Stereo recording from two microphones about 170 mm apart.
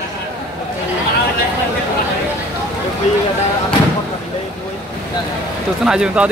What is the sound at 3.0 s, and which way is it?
Speech, 45° left (ahead or behind).